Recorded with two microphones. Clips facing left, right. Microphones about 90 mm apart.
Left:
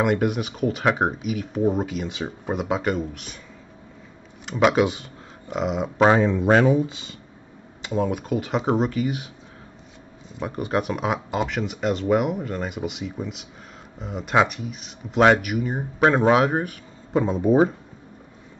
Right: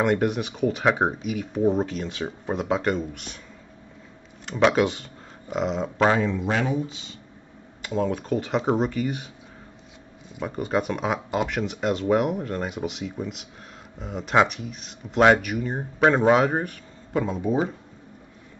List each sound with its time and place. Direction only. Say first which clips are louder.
0.0 s speech: left 1 dB; 5° left (ahead or behind)
4.5 s speech: left 1 dB; 5° left (ahead or behind)
6.0 s speech: left 4 dB; 30° left (ahead or behind)
6.4 s speech: left 8 dB; 45° left (ahead or behind)
7.8 s speech: left 1 dB; 15° left (ahead or behind)
10.4 s speech: left 1 dB; 5° left (ahead or behind)
17.1 s speech: left 4 dB; 25° left (ahead or behind)
17.4 s speech: left 8 dB; 45° left (ahead or behind)